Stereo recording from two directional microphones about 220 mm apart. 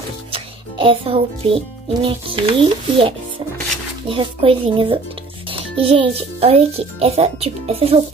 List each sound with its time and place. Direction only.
0.3 s music: 25° right (ahead or behind)
2.0 s a child's voice: 25° right (ahead or behind)